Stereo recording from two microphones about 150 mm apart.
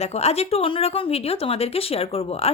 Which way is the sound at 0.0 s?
45° left (ahead or behind).